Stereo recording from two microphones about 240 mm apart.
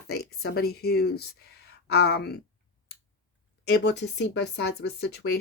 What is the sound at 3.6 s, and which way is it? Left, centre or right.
Speech, left.